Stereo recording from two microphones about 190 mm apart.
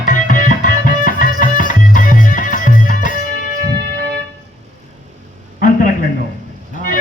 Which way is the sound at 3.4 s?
60° right (ahead or behind).